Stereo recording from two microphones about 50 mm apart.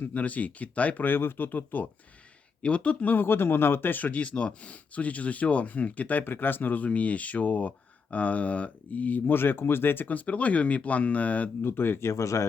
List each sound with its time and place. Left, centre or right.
0.1 s speech: left
2.6 s speech: left
9.2 s speech: left
11.6 s speech: left
12.0 s speech: left